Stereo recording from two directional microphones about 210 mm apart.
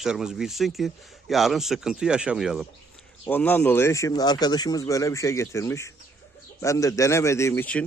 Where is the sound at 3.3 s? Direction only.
10° left (ahead or behind).